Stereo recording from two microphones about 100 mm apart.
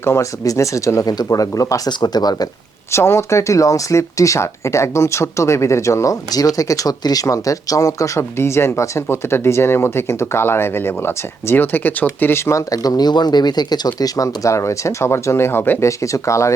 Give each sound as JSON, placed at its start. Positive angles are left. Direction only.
{"t": 0.0, "sound": "speech", "side_deg": 30}
{"t": 2.9, "sound": "speech", "side_deg": 25}